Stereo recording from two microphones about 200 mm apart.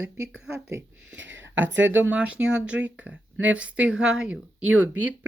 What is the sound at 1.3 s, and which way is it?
Speech, 70° right (ahead or behind).